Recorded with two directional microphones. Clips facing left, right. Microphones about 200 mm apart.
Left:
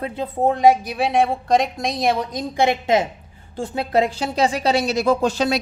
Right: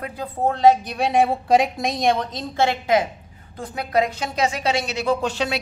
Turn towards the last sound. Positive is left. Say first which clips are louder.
# left 4 dB
turn(degrees=40)  # may be behind; listen again after turning